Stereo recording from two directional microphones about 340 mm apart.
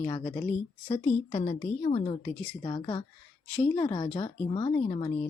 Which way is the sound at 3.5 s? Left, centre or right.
Centre.